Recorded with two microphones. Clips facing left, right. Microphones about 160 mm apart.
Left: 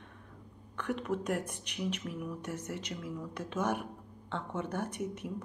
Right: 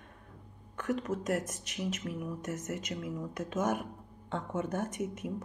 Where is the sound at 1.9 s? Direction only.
45° right (ahead or behind).